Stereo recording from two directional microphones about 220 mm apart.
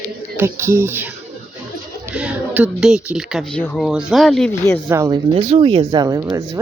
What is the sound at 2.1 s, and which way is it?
Speech, 5° right (ahead or behind).